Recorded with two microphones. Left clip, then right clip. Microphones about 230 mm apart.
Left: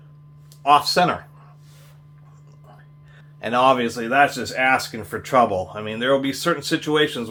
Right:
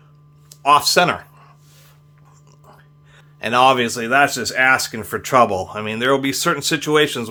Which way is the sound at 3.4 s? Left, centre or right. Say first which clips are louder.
Right 3 dB; right.